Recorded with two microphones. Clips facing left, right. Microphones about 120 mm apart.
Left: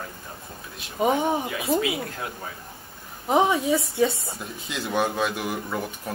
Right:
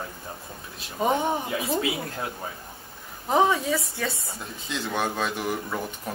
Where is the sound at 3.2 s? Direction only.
20° left (ahead or behind).